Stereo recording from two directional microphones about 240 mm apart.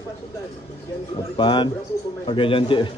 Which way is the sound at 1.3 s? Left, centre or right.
Centre.